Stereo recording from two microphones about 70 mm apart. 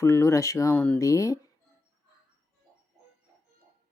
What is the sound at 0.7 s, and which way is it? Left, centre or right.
Speech, left.